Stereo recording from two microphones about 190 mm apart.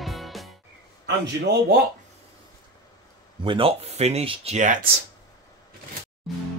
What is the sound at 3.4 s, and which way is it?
Speech, 25° right (ahead or behind).